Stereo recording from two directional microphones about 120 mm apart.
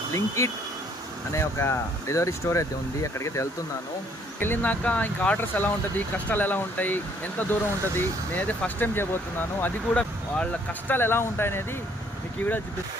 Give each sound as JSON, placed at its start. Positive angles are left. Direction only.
{"t": 0.1, "sound": "speech", "side_deg": 25}